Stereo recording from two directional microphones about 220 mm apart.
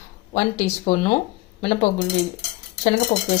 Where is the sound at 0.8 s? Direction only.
30° left (ahead or behind).